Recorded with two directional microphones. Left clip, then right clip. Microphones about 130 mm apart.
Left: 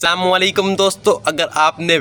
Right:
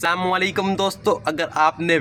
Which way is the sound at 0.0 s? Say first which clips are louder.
Left 6 dB; 30° left (ahead or behind).